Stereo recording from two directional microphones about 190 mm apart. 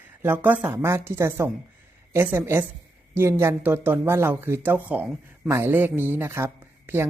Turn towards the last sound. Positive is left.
turn(degrees=-10)  # may be behind; listen again after turning